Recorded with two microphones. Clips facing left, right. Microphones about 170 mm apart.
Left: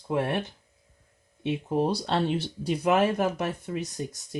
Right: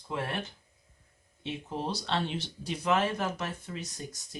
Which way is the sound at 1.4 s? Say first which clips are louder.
Left 9 dB; 55° left (ahead or behind).